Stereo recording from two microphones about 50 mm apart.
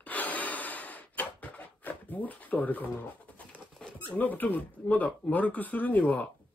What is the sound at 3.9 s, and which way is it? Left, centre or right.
Speech, left.